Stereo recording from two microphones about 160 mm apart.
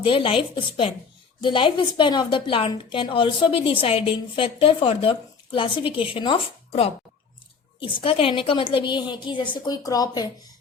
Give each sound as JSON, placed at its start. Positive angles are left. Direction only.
{"t": 0.0, "sound": "a woman's voice", "side_deg": 35}